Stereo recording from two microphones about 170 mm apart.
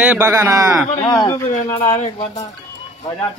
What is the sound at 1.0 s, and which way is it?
Speech, 20° left (ahead or behind).